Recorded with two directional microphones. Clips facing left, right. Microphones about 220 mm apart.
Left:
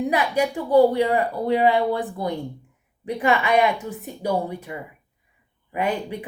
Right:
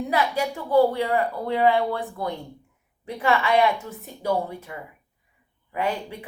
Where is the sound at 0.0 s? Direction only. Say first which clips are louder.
Left 3 dB; 15° left (ahead or behind).